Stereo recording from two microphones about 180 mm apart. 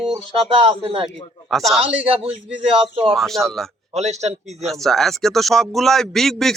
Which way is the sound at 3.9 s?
40° right (ahead or behind).